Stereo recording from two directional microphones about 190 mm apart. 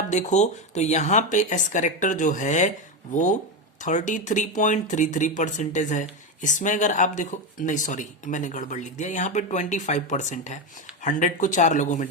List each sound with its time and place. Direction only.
0.1 s speech: 40° left (ahead or behind)